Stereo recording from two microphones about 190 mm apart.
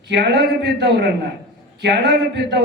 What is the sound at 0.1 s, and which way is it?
A man's voice, 65° right (ahead or behind).